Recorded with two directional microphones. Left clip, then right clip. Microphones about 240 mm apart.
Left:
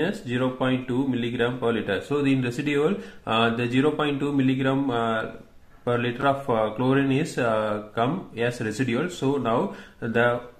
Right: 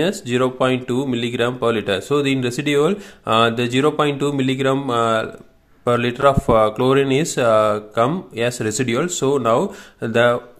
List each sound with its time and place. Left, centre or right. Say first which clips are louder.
0.0 s speech: right 7 dB; right